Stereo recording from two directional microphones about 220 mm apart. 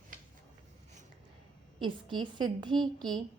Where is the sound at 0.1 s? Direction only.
40° right (ahead or behind).